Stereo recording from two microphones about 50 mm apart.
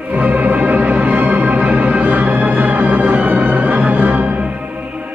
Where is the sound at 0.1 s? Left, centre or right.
Right.